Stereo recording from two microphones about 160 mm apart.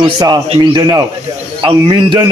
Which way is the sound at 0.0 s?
25° right (ahead or behind).